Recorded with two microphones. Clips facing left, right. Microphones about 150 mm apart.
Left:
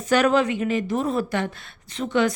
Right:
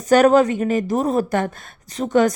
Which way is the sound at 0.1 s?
40° right (ahead or behind).